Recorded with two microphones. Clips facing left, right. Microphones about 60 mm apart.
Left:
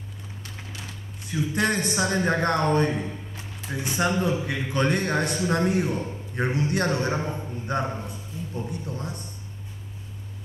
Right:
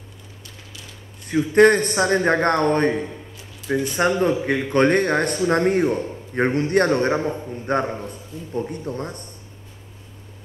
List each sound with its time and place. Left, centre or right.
1.3 s a man's voice: right